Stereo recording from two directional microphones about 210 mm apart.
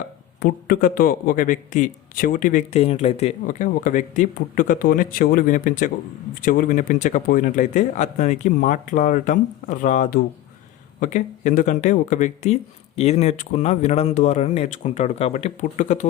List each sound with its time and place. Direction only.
0.3 s a man's voice: 45° left (ahead or behind)